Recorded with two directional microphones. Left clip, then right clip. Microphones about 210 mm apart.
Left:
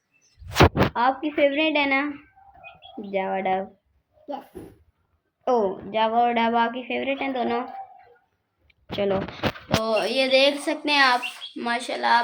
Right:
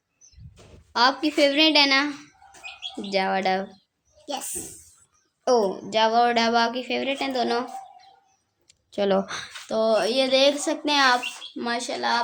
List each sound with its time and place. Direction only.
0.9 s a woman's voice: 25° right (ahead or behind)
3.1 s a woman's voice: 25° right (ahead or behind)
5.5 s a woman's voice: 25° right (ahead or behind)
8.6 s a sound: 25° right (ahead or behind)
9.6 s a woman's voice: 25° right (ahead or behind)